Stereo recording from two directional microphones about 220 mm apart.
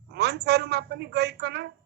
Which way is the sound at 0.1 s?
50° right (ahead or behind).